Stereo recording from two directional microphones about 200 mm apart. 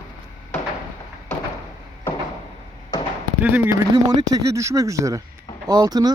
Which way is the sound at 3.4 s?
10° right (ahead or behind).